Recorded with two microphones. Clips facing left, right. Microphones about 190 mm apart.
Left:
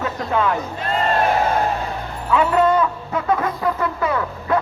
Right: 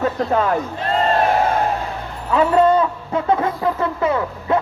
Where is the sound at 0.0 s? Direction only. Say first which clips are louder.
Right 3 dB; 40° right (ahead or behind).